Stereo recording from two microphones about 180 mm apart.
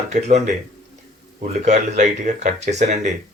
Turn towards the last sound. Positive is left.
turn(degrees=-40)  # may be behind; listen again after turning